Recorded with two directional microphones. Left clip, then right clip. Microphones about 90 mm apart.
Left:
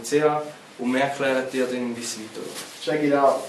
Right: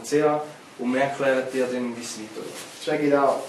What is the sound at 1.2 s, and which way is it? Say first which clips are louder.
Speech: right 3 dB; 20° left (ahead or behind).